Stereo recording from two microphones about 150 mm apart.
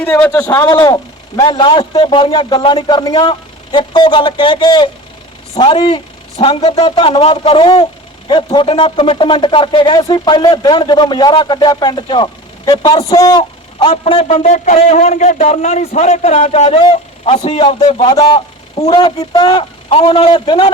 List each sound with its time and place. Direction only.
0.0 s a man's voice: 10° left (ahead or behind)
0.3 s a man's voice: 25° left (ahead or behind)